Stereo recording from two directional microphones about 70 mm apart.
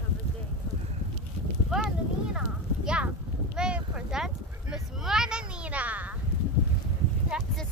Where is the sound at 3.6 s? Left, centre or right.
Centre.